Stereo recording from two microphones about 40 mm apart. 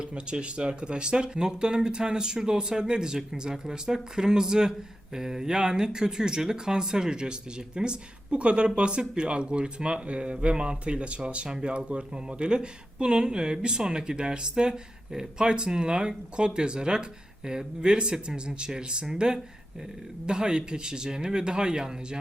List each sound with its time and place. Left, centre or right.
0.0 s speech: right